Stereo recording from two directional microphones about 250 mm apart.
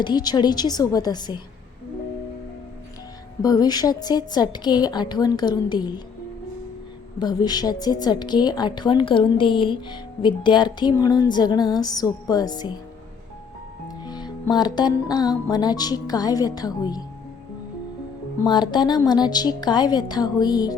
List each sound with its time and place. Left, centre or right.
0.0 s a woman's voice: centre
3.4 s a woman's voice: centre
7.2 s a woman's voice: centre
14.0 s a woman's voice: centre
18.4 s a woman's voice: centre